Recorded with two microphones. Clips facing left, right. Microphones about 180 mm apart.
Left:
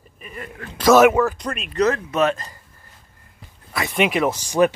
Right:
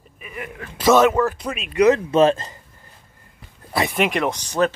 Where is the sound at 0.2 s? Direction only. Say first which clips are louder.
Right 1 dB; 10° right (ahead or behind); by 1.3 s 10° left (ahead or behind).